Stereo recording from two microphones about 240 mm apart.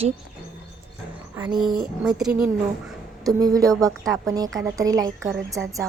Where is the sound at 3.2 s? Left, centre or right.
Centre.